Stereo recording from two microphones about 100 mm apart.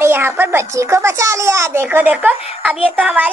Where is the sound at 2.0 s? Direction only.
10° right (ahead or behind).